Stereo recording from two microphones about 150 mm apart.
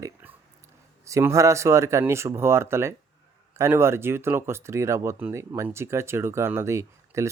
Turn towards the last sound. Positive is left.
turn(degrees=-20)  # may be behind; listen again after turning